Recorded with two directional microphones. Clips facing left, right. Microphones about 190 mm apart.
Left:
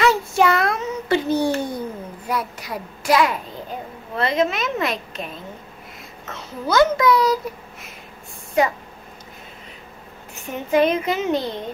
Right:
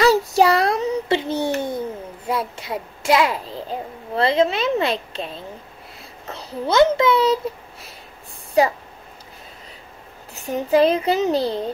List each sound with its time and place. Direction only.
0.0 s a sound: 35° right (ahead or behind)
2.2 s a child's voice: 25° right (ahead or behind)
10.3 s a child's voice: 35° right (ahead or behind)